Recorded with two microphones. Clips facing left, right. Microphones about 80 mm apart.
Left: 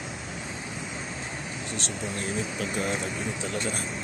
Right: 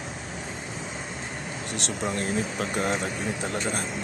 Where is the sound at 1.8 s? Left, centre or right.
Right.